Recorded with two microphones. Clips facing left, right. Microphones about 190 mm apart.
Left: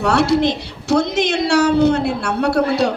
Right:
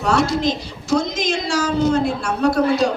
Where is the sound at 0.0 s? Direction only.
65° left (ahead or behind).